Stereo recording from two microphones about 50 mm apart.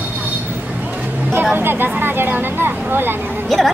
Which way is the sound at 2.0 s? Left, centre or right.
Right.